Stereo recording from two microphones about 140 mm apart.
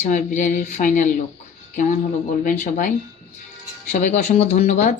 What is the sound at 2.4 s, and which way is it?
Speech, 65° left (ahead or behind).